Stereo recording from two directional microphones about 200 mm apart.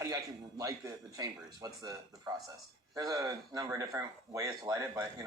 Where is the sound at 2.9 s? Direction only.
20° right (ahead or behind).